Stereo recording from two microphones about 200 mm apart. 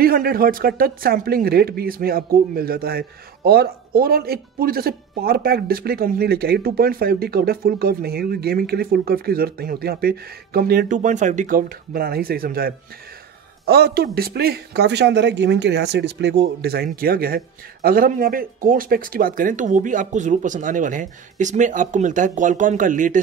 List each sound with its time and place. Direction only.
0.0 s speech: 50° right (ahead or behind)